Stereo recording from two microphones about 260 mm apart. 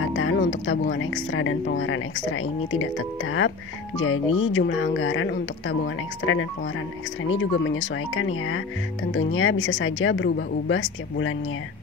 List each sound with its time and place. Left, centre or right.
0.0 s speech: left